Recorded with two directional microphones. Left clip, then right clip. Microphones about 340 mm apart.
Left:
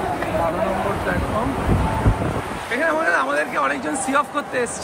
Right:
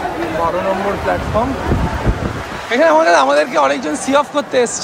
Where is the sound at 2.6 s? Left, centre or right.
Centre.